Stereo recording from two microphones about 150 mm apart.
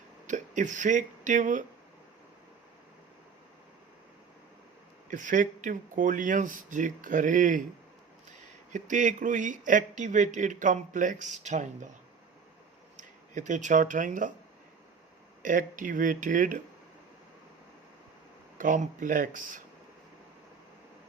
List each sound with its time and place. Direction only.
0.3 s speech: 55° right (ahead or behind)
5.1 s speech: 60° right (ahead or behind)
8.7 s speech: 60° right (ahead or behind)
13.0 s speech: 55° right (ahead or behind)
15.4 s speech: 65° right (ahead or behind)
18.5 s speech: 60° right (ahead or behind)